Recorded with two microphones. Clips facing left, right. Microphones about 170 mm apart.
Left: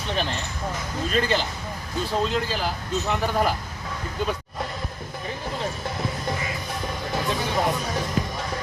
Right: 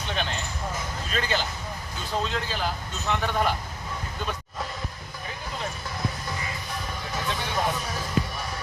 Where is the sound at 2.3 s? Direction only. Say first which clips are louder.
Left 3 dB; 5° left (ahead or behind).